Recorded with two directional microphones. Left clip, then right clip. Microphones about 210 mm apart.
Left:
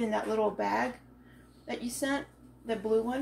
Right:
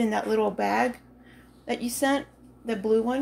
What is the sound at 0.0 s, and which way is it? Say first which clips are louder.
Speech: right 5 dB; 50° right (ahead or behind).